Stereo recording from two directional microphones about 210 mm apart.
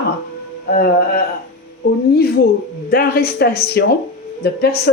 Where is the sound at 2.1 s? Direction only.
50° left (ahead or behind).